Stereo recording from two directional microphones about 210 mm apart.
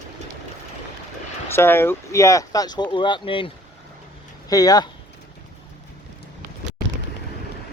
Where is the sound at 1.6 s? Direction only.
10° left (ahead or behind).